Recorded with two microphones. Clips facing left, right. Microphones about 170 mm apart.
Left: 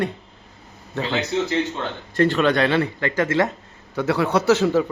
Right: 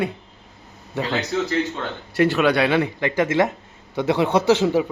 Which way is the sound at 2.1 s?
10° right (ahead or behind).